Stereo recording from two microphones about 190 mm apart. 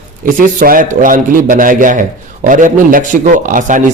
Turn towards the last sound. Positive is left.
turn(degrees=-45)  # may be behind; listen again after turning